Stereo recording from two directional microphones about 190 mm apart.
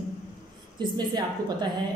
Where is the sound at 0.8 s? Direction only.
25° right (ahead or behind).